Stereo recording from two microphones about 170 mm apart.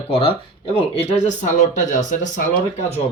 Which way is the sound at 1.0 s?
45° left (ahead or behind).